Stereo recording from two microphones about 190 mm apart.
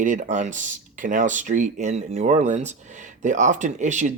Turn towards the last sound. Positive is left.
turn(degrees=-40)  # may be behind; listen again after turning